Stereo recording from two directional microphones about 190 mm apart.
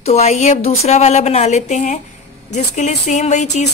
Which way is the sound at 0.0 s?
35° left (ahead or behind).